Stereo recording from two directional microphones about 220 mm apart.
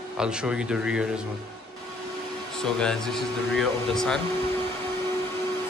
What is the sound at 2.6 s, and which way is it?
Speech, 5° left (ahead or behind).